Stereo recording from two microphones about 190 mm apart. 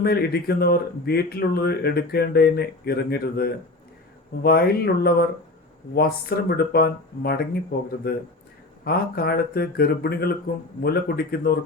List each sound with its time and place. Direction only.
0.0 s speech: 55° left (ahead or behind)